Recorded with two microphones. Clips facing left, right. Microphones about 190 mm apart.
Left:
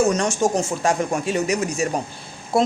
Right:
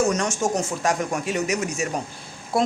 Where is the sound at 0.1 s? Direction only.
30° left (ahead or behind).